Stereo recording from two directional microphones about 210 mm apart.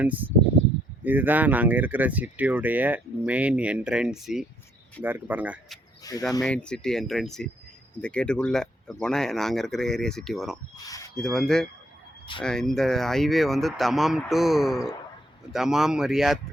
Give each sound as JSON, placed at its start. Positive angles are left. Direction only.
{"t": 0.0, "sound": "speech", "side_deg": -10}
{"t": 6.0, "sound": "speech", "side_deg": 15}
{"t": 6.4, "sound": "speech", "side_deg": 5}
{"t": 10.8, "sound": "a sound", "side_deg": 15}
{"t": 11.2, "sound": "speech", "side_deg": 0}